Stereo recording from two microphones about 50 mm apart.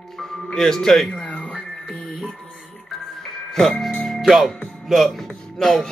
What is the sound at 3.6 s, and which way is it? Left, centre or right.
Music, centre.